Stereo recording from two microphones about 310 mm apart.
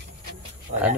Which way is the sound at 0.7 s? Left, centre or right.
Right.